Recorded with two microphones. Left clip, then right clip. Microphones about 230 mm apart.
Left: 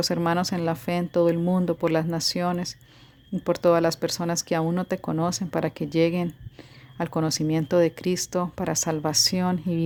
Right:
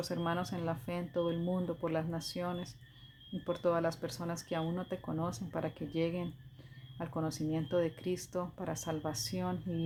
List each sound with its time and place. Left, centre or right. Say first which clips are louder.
0.0 s speech: left 12 dB; left